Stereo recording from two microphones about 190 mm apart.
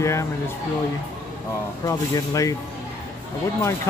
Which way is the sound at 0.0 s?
15° left (ahead or behind).